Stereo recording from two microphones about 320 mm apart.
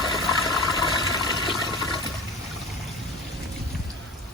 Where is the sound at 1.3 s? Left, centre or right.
Centre.